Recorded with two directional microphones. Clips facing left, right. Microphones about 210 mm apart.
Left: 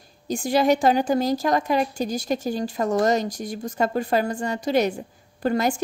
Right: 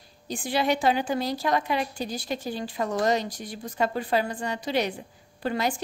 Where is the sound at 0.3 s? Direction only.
45° left (ahead or behind).